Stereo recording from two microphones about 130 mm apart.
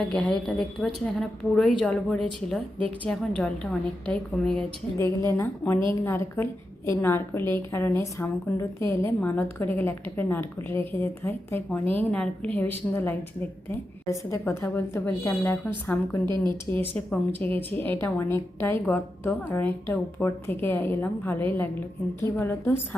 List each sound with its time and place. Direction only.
0.1 s a woman's voice: 5° left (ahead or behind)
4.9 s a woman's voice: 20° left (ahead or behind)
16.2 s speech: 35° right (ahead or behind)
16.7 s a woman's voice: 15° left (ahead or behind)